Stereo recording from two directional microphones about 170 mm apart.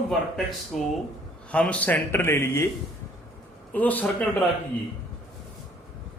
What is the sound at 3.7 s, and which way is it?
Speech, 10° left (ahead or behind).